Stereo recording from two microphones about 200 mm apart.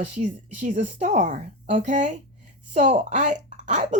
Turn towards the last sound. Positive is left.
turn(degrees=-40)  # may be behind; listen again after turning